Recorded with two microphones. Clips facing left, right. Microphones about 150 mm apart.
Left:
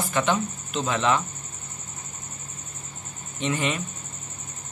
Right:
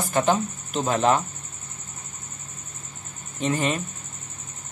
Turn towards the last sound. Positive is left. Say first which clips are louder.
# right 2 dB
turn(degrees=-40)  # may be behind; listen again after turning